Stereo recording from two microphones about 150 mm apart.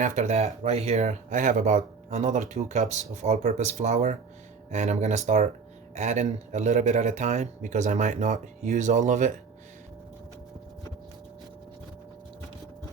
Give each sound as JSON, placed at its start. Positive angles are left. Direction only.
{"t": 0.0, "sound": "speech", "side_deg": -50}